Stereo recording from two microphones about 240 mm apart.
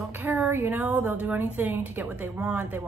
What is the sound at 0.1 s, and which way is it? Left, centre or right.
A woman's voice, centre.